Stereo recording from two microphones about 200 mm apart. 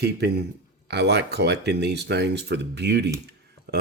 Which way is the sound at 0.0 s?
55° right (ahead or behind).